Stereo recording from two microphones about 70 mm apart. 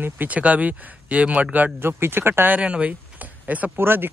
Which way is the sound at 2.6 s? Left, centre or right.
Centre.